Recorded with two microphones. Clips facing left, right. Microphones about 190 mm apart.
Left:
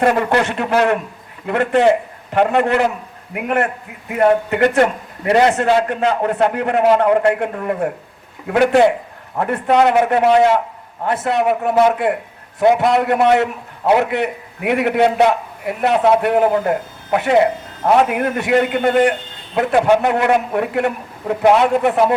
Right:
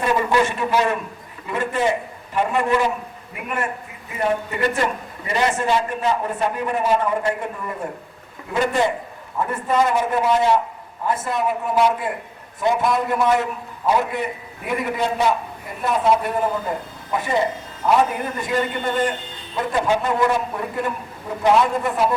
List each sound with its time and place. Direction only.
0.0 s a man's voice: 70° left (ahead or behind)